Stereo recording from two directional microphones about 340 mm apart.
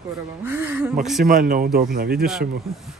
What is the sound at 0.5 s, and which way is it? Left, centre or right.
Speech, centre.